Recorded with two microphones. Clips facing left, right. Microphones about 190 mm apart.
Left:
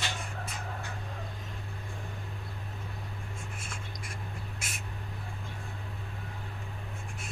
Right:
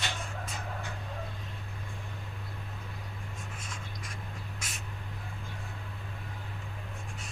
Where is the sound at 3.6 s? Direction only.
10° left (ahead or behind).